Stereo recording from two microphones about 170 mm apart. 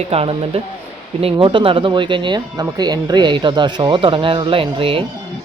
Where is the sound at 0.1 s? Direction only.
35° right (ahead or behind).